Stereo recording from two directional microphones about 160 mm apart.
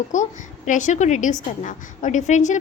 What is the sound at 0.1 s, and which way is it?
A woman's voice, 50° left (ahead or behind).